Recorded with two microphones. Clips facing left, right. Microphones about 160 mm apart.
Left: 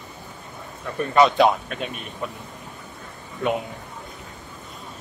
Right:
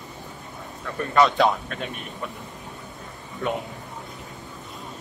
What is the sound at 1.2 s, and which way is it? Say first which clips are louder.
Speech: left 2 dB; 15° left (ahead or behind).